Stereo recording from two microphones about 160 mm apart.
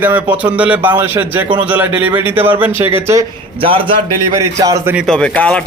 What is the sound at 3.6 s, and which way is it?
Speech, 35° right (ahead or behind).